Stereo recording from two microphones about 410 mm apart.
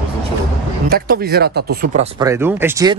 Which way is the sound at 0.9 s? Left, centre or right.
Right.